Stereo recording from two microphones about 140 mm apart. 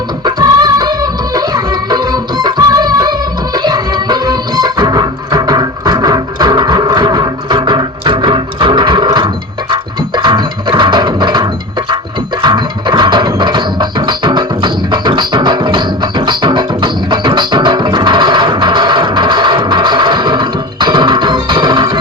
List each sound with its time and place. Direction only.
0.3 s music: 30° right (ahead or behind)